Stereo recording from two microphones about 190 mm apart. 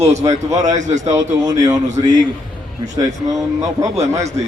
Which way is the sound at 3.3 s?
15° right (ahead or behind).